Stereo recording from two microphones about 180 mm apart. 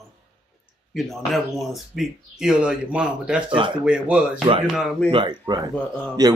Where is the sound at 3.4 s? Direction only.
30° right (ahead or behind).